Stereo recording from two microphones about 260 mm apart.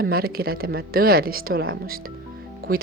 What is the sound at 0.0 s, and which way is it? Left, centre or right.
Speech, right.